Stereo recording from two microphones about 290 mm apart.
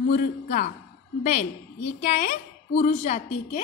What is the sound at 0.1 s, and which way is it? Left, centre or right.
Speech, left.